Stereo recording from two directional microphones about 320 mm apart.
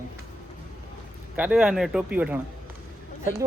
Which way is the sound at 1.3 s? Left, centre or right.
Centre.